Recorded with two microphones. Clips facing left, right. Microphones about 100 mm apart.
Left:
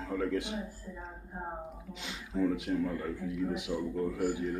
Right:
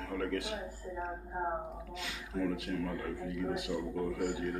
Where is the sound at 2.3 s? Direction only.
20° left (ahead or behind).